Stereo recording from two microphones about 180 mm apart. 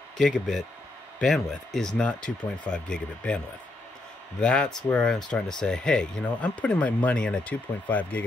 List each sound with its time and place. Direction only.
0.2 s speech: centre (ahead or behind)
4.4 s speech: 5° left (ahead or behind)